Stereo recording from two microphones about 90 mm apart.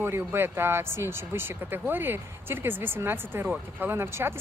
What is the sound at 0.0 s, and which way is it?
Speech, 25° right (ahead or behind).